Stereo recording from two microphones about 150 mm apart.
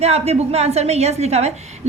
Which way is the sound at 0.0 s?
45° right (ahead or behind).